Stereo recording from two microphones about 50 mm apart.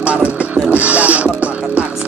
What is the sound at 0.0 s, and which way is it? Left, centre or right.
Music, right.